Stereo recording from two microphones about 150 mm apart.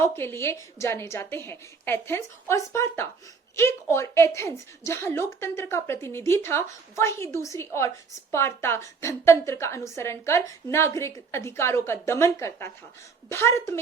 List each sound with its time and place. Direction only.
0.0 s a woman's voice: 15° left (ahead or behind)